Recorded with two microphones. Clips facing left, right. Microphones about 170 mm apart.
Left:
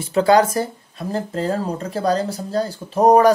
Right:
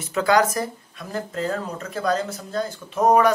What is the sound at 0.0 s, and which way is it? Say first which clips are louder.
Speech: left 5 dB; 30° left (ahead or behind).